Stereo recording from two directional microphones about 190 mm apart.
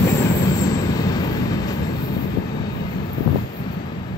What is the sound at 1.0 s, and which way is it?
Vehicle, 20° left (ahead or behind).